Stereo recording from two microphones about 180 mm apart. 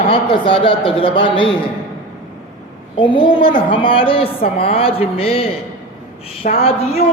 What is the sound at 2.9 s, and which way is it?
A man's voice, 25° left (ahead or behind).